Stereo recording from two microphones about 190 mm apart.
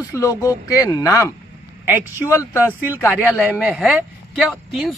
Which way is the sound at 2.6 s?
10° right (ahead or behind).